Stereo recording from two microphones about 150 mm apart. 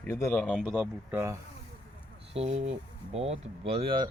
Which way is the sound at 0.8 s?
15° right (ahead or behind).